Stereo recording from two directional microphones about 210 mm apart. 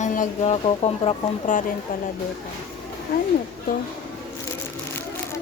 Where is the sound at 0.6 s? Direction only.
30° left (ahead or behind).